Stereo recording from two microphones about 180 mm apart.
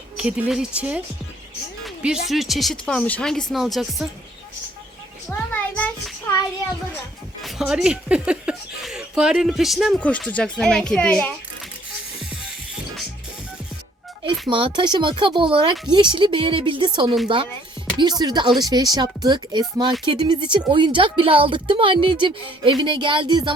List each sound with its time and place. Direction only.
0.2 s speech: 5° right (ahead or behind)
1.8 s music: 5° right (ahead or behind)
2.2 s speech: centre (ahead or behind)
5.3 s a sound: 10° left (ahead or behind)
7.4 s speech: 5° right (ahead or behind)
14.4 s speech: 25° right (ahead or behind)